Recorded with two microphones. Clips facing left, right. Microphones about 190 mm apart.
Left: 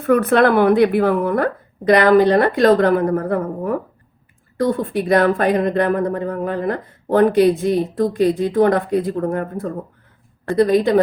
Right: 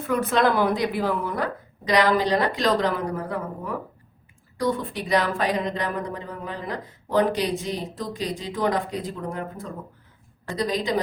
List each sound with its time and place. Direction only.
0.0 s speech: 60° left (ahead or behind)